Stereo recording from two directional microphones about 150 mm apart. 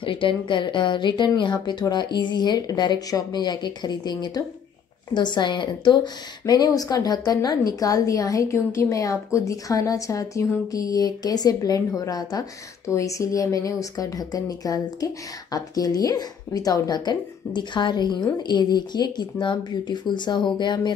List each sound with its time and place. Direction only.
0.0 s a woman's voice: 35° left (ahead or behind)